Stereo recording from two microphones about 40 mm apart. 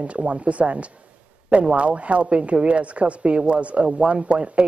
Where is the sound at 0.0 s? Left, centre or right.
Right.